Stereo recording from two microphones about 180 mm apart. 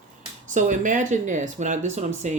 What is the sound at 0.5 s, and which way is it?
Speech, 45° right (ahead or behind).